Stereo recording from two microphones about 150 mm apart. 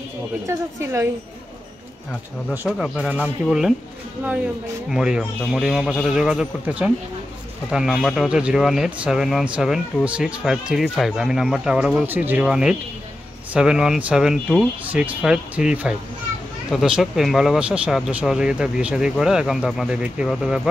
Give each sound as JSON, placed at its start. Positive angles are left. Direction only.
{"t": 0.5, "sound": "a woman's voice", "side_deg": -20}
{"t": 2.6, "sound": "speech", "side_deg": 0}
{"t": 4.8, "sound": "speech", "side_deg": -5}